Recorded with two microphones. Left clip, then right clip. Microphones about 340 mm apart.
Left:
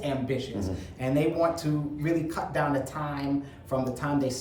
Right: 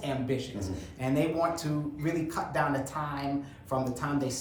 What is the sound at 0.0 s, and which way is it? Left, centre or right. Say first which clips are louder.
Speech: left 2 dB; centre.